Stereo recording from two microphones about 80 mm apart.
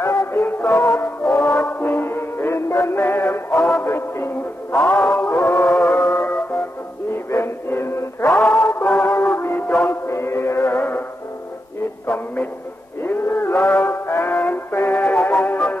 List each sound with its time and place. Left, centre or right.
0.0 s music: left
0.7 s music: centre; by 3.5 s left
3.5 s music: centre
3.8 s a sound: left
4.8 s music: centre
7.2 s music: left
8.3 s music: centre
9.1 s music: left
9.8 s chant: left
10.7 s music: left
13.0 s music: left